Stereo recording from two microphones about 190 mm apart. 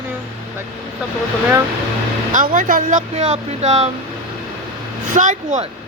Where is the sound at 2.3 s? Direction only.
45° right (ahead or behind).